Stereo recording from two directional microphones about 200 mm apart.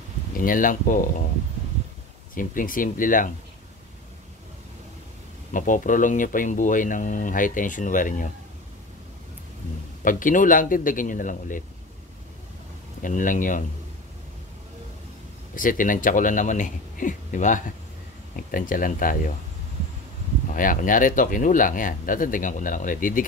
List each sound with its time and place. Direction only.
0.4 s speech: 45° left (ahead or behind)
2.3 s speech: 45° left (ahead or behind)
5.5 s speech: 40° left (ahead or behind)
10.0 s speech: 40° left (ahead or behind)
13.0 s speech: 40° left (ahead or behind)
15.5 s speech: 45° left (ahead or behind)
20.5 s speech: 40° left (ahead or behind)